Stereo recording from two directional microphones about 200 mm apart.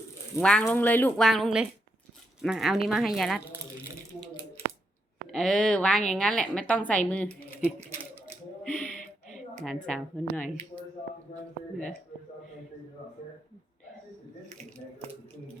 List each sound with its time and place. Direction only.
0.3 s a woman's voice: 5° left (ahead or behind)
5.3 s a woman's voice: centre (ahead or behind)
7.3 s typewriter: 10° right (ahead or behind)
8.6 s a sound: 5° left (ahead or behind)
8.9 s a sound: 40° left (ahead or behind)
9.6 s a woman's voice: 5° left (ahead or behind)